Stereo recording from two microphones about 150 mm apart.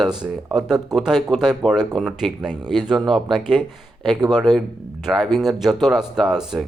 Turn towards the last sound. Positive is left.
turn(degrees=-5)  # may be behind; listen again after turning